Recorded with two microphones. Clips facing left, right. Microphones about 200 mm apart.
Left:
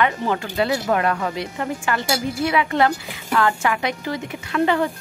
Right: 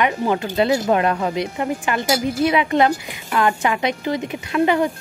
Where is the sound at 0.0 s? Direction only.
15° right (ahead or behind).